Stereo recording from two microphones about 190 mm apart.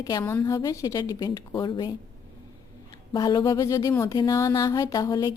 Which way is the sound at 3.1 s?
20° left (ahead or behind).